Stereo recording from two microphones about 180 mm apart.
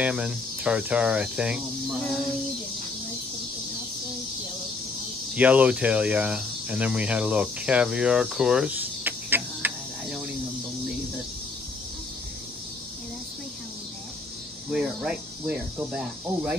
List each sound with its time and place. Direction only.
0.0 s speech: 5° right (ahead or behind)
5.3 s speech: 10° right (ahead or behind)
14.7 s speech: 5° right (ahead or behind)